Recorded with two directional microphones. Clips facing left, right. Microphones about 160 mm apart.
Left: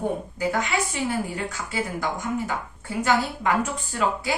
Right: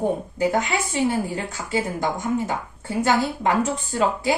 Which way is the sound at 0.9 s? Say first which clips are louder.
Right 4 dB; 25° right (ahead or behind).